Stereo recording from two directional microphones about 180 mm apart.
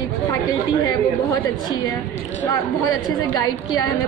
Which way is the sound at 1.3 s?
20° left (ahead or behind).